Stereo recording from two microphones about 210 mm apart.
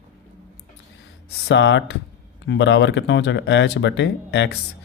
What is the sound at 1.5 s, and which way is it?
Speech, 60° left (ahead or behind).